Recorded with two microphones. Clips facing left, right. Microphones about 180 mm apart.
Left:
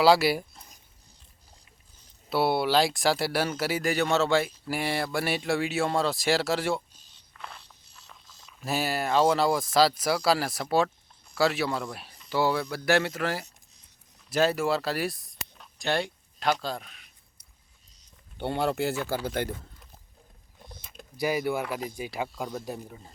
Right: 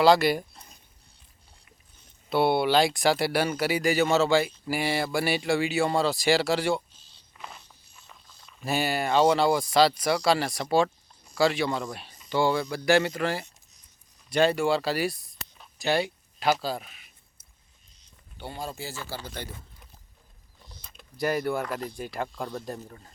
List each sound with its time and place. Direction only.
0.0 s speech: 5° left (ahead or behind)
2.3 s speech: centre (ahead or behind)
7.3 s a sound: 5° right (ahead or behind)
8.0 s speech: centre (ahead or behind)
18.3 s speech: 70° left (ahead or behind)
19.0 s speech: 55° left (ahead or behind)
21.2 s speech: 5° left (ahead or behind)